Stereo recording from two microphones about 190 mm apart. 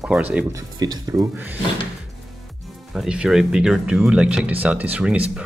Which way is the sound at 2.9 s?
5° right (ahead or behind).